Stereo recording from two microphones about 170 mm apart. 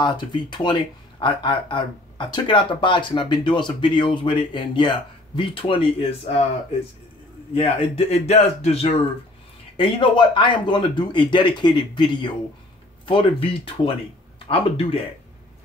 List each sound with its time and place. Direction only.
0.0 s speech: 25° left (ahead or behind)
7.5 s speech: 35° left (ahead or behind)
9.8 s speech: 30° left (ahead or behind)